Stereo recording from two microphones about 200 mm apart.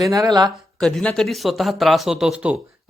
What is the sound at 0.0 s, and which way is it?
Speech, 20° right (ahead or behind).